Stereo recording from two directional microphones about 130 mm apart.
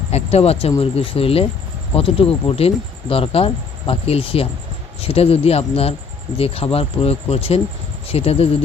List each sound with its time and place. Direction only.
0.1 s speech: 55° left (ahead or behind)